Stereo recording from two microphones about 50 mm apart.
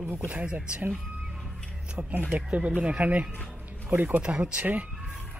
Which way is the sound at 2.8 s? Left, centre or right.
Right.